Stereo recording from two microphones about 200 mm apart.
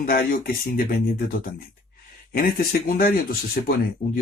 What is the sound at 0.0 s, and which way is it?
Speech, 45° left (ahead or behind).